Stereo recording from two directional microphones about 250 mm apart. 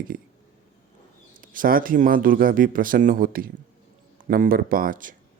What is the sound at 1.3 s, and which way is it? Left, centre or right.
Speech, right.